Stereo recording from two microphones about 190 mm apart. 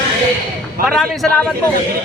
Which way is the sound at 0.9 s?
Centre (ahead or behind).